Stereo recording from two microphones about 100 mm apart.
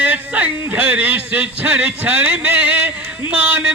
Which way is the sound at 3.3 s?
15° right (ahead or behind).